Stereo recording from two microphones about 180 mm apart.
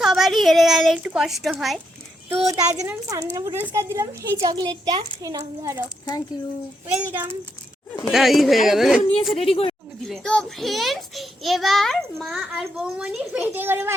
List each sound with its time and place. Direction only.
0.0 s a child's voice: centre (ahead or behind)
2.5 s speech: 20° right (ahead or behind)
6.8 s a child's voice: 10° right (ahead or behind)
8.0 s a child's voice: centre (ahead or behind)
9.3 s a woman's voice: 30° left (ahead or behind)
10.0 s a child's voice: 5° left (ahead or behind)